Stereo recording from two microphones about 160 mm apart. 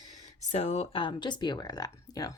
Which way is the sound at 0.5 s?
45° left (ahead or behind).